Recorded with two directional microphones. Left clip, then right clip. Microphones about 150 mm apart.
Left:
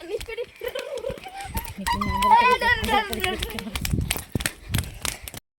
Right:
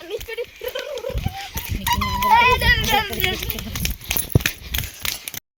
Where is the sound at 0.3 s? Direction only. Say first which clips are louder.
Right 3 dB; 25° left (ahead or behind).